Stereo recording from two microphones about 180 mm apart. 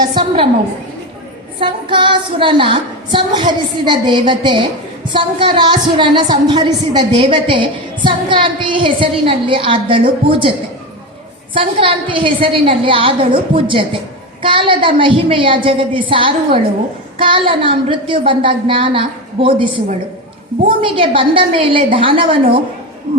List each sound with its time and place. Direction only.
0.0 s a woman's voice: 25° right (ahead or behind)
1.5 s a woman's voice: 25° right (ahead or behind)
11.5 s a woman's voice: 30° right (ahead or behind)
20.8 s a woman's voice: 30° right (ahead or behind)